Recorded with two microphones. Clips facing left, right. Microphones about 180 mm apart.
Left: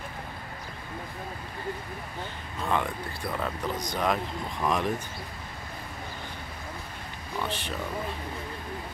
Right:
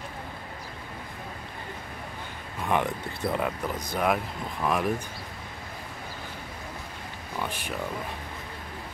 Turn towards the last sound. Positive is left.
turn(degrees=-10)  # may be behind; listen again after turning